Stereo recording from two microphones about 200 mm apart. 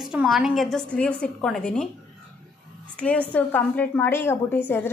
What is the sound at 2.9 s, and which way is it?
A woman's voice, 5° left (ahead or behind).